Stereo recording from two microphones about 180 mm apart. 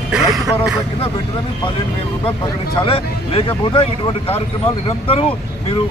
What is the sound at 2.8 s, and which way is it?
Speech, 30° left (ahead or behind).